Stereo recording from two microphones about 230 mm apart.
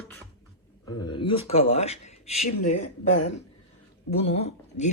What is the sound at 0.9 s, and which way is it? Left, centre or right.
Speech, centre.